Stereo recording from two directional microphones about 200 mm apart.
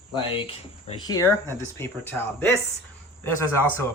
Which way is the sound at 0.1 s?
30° left (ahead or behind).